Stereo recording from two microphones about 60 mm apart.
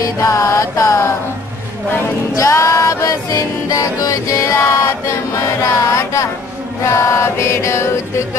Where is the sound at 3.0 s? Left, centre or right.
Left.